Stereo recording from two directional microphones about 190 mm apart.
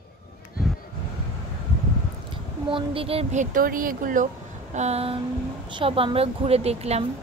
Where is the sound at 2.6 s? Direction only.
25° right (ahead or behind); by 4.2 s 45° right (ahead or behind).